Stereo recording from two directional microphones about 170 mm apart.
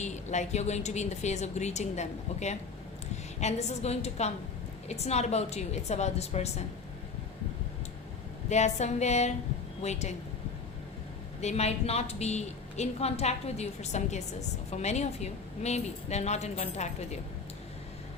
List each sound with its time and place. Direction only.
0.0 s a woman's voice: 45° left (ahead or behind)
8.4 s a woman's voice: 40° left (ahead or behind)
11.3 s a woman's voice: 40° left (ahead or behind)